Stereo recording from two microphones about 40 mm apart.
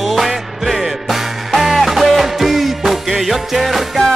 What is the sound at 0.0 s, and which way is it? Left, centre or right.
Music, centre.